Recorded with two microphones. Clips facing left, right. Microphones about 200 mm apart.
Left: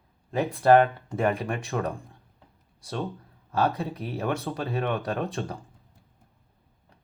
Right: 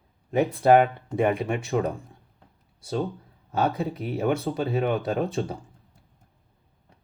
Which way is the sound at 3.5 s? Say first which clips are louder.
Right 1 dB; 20° right (ahead or behind).